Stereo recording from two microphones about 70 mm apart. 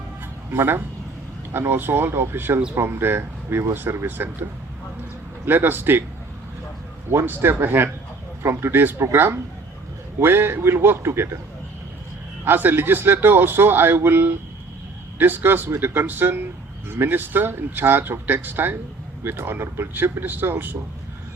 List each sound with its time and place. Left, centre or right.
0.5 s a man's voice: right
5.5 s a man's voice: right
7.1 s a man's voice: right
12.5 s a man's voice: right